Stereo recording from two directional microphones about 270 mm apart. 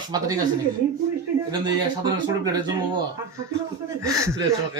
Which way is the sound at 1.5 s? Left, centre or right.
Centre.